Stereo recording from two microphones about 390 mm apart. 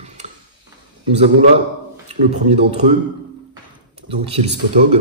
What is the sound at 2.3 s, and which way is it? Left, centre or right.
Speech, centre.